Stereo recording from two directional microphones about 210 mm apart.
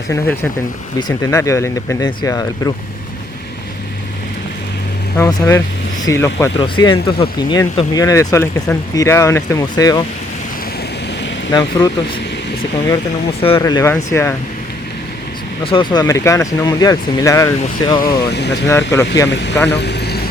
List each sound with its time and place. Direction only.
0.9 s speech: 20° left (ahead or behind)
5.1 s speech: 15° left (ahead or behind)
11.5 s speech: 20° left (ahead or behind)
13.4 s speech: 20° left (ahead or behind)
15.6 s speech: 25° left (ahead or behind)
18.3 s speech: 55° left (ahead or behind)
18.7 s speech: 10° left (ahead or behind)
19.3 s speech: 55° left (ahead or behind)
19.7 s vehicle: 50° left (ahead or behind)